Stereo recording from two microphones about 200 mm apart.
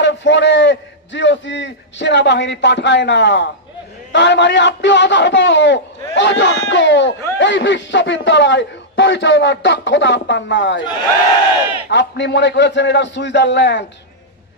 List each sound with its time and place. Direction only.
0.0 s a man's voice: 65° left (ahead or behind)
11.9 s a man's voice: 60° left (ahead or behind)